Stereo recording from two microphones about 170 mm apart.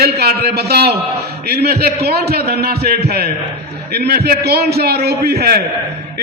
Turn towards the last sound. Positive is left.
turn(degrees=-65)  # may be behind; listen again after turning